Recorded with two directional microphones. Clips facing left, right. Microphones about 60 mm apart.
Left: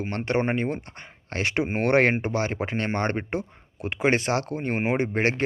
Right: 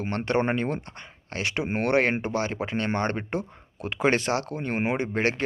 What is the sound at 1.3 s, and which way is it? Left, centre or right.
Speech, left.